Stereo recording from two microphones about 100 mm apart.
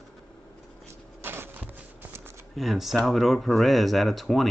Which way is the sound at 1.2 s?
20° right (ahead or behind).